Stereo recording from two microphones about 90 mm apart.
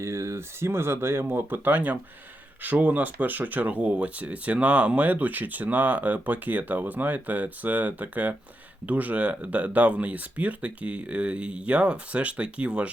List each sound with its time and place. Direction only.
0.0 s speech: 35° right (ahead or behind); by 12.9 s 15° right (ahead or behind)